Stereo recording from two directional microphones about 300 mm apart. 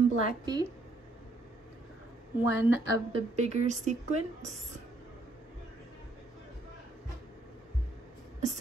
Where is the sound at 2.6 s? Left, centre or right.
Left.